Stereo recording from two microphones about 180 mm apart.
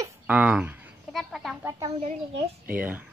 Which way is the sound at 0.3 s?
5° right (ahead or behind).